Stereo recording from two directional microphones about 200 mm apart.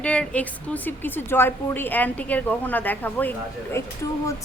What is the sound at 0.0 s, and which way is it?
A woman's voice, 5° left (ahead or behind).